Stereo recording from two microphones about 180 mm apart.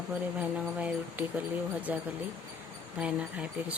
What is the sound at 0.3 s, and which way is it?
Speech, 10° right (ahead or behind).